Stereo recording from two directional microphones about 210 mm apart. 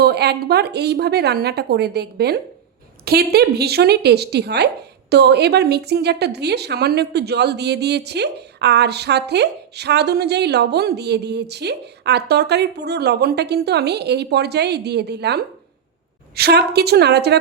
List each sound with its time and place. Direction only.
0.0 s a woman's voice: 50° right (ahead or behind)